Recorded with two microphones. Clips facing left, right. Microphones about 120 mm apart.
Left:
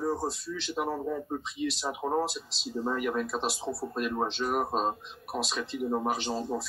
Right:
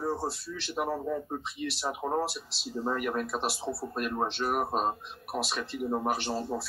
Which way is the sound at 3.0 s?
50° right (ahead or behind).